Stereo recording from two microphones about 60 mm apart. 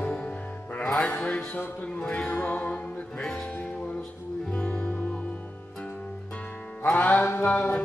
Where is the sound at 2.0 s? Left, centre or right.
Centre.